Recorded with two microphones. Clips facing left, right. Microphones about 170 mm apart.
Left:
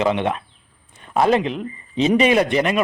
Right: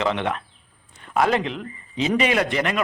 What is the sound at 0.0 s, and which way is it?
A man's voice, 20° left (ahead or behind).